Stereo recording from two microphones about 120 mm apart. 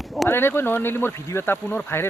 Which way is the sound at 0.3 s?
20° left (ahead or behind).